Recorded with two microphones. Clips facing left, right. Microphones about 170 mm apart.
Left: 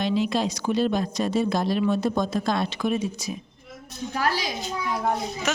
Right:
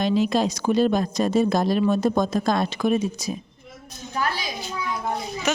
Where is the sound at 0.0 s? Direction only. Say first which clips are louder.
Right 3 dB; 45° right (ahead or behind).